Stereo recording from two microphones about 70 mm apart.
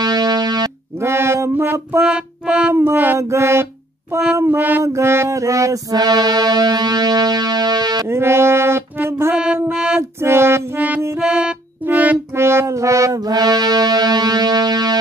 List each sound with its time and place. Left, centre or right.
0.0 s music: right
1.0 s mantra: right
2.0 s music: centre
2.7 s speech: right
3.2 s music: right
4.5 s speech: right
4.8 s music: right
8.1 s music: right
9.4 s music: centre
10.2 s music: right
11.1 s music: centre
11.8 s music: right
12.4 s music: right